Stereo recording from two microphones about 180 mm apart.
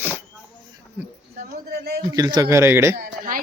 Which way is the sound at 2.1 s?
20° right (ahead or behind).